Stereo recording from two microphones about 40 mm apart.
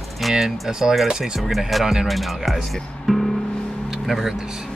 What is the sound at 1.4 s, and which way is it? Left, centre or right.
Speech, centre.